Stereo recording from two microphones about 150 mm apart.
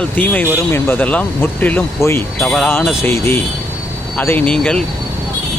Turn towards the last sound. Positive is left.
turn(degrees=5)  # may be behind; listen again after turning